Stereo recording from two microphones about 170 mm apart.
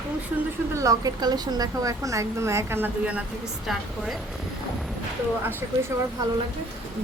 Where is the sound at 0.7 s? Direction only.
20° right (ahead or behind); by 4.2 s centre (ahead or behind).